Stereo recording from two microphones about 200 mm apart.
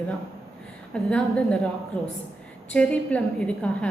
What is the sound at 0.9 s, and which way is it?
Speech, 5° left (ahead or behind).